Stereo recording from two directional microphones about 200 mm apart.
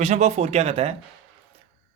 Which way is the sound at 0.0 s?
35° right (ahead or behind).